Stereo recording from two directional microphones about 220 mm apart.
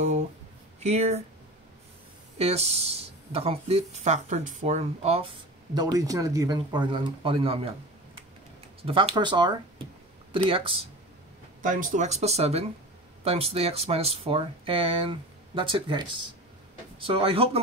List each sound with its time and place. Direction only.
0.7 s speech: 30° right (ahead or behind)
2.3 s speech: 30° right (ahead or behind)
5.8 s speech: 15° right (ahead or behind)
8.8 s speech: 25° right (ahead or behind)
11.6 s speech: 35° right (ahead or behind)